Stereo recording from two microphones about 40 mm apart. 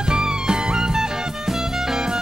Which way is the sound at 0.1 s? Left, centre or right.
Centre.